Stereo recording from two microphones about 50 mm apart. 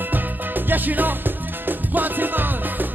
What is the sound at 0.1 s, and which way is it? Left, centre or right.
Music, right.